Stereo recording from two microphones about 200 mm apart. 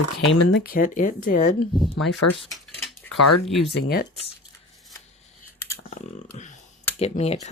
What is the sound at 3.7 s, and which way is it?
Speech, 55° left (ahead or behind).